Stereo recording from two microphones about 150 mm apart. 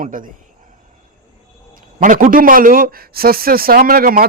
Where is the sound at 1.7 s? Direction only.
65° right (ahead or behind).